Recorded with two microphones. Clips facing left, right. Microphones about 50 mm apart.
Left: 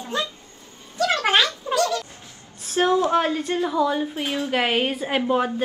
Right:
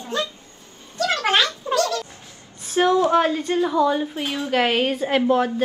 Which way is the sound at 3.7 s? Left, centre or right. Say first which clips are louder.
Right 2 dB; centre.